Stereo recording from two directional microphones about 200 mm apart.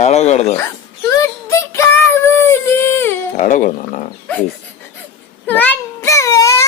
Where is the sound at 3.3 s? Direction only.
40° left (ahead or behind).